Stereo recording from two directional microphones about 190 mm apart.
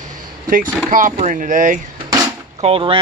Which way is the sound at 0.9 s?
45° right (ahead or behind).